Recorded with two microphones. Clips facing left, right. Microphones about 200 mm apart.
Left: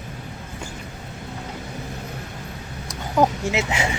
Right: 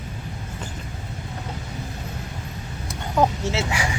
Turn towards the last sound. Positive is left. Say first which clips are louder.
# left 2 dB
turn(degrees=25)  # may be behind; listen again after turning